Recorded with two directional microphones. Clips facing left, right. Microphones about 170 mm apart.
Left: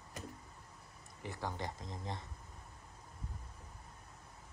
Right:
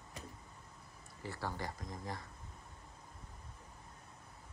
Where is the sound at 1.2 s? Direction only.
20° left (ahead or behind).